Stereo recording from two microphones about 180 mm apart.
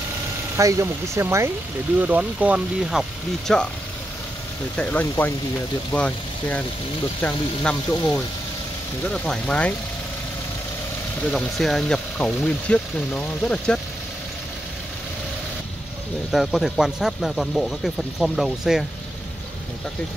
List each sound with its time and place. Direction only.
0.6 s speech: 15° right (ahead or behind); by 3.6 s centre (ahead or behind)
4.7 s speech: 5° left (ahead or behind)
11.2 s speech: centre (ahead or behind)
16.3 s speech: centre (ahead or behind)